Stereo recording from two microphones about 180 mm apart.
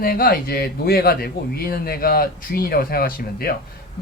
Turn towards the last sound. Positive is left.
turn(degrees=55)  # may be behind; listen again after turning